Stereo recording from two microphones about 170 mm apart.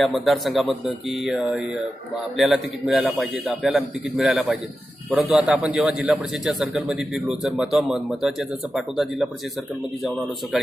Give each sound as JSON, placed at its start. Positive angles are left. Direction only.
{"t": 0.0, "sound": "a man's voice", "side_deg": 0}